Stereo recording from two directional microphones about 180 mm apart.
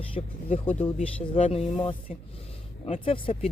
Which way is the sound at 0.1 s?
35° left (ahead or behind).